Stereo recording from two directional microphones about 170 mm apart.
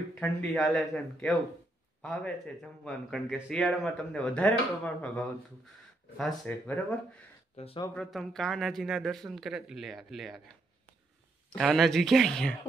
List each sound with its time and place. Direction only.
0.1 s speech: 5° left (ahead or behind)
7.5 s speech: 35° left (ahead or behind)
7.9 s speech: 5° left (ahead or behind)
11.5 s speech: centre (ahead or behind)